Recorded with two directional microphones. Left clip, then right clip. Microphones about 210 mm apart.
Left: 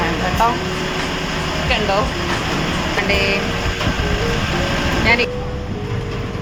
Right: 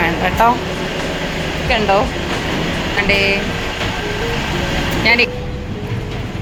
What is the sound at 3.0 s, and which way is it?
Speech, 15° right (ahead or behind).